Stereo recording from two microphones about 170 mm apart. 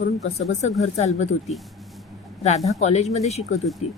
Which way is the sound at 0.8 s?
40° left (ahead or behind).